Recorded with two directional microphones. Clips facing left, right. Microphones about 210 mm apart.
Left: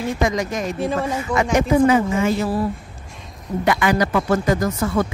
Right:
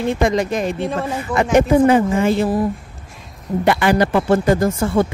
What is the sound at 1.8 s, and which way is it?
Speech, 30° right (ahead or behind).